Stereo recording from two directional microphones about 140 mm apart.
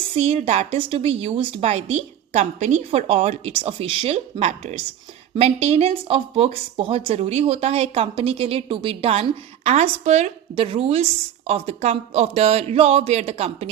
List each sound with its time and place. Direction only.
0.2 s a woman's voice: 50° right (ahead or behind)
10.5 s a woman's voice: 40° right (ahead or behind)